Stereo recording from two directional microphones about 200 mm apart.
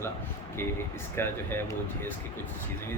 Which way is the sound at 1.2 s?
10° left (ahead or behind).